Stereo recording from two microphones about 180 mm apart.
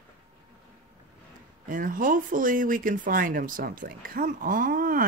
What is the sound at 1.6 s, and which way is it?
Speech, 50° right (ahead or behind).